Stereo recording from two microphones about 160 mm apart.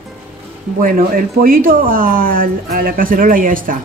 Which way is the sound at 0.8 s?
65° right (ahead or behind).